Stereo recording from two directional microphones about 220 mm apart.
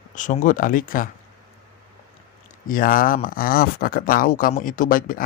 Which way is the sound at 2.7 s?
40° left (ahead or behind).